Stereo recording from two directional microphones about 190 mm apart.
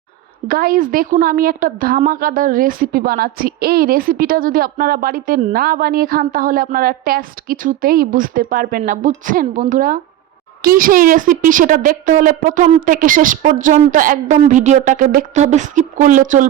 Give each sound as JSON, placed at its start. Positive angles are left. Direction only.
{"t": 0.4, "sound": "a woman's voice", "side_deg": -50}